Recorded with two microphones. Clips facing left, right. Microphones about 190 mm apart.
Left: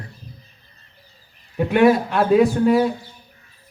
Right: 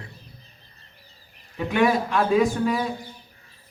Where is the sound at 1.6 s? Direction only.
60° left (ahead or behind).